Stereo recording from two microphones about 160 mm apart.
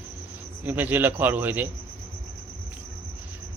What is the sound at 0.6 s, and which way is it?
Speech, 10° right (ahead or behind).